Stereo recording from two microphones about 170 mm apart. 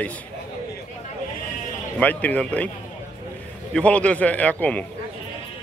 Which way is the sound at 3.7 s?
5° left (ahead or behind).